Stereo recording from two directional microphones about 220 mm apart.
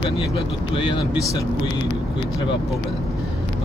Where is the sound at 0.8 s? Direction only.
25° left (ahead or behind).